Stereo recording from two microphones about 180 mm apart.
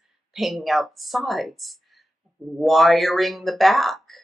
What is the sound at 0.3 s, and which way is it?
Speech, centre (ahead or behind).